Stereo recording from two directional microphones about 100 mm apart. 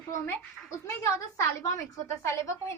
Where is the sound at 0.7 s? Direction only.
30° left (ahead or behind).